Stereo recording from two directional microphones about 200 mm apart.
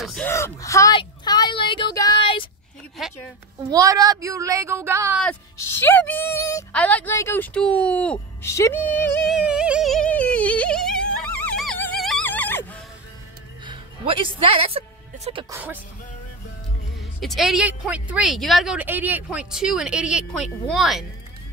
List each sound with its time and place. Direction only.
0.0 s a sound: centre (ahead or behind)
0.3 s a sound: 15° left (ahead or behind)
3.7 s speech: 15° right (ahead or behind)
5.2 s a woman's voice: 10° left (ahead or behind)
9.3 s music: 5° right (ahead or behind)
13.7 s music: 25° right (ahead or behind)
15.5 s speech: 10° right (ahead or behind)
17.2 s a woman's voice: centre (ahead or behind)